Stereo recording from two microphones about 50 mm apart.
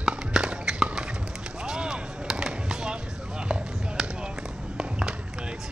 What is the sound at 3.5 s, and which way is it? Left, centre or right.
Basketball bounce, centre.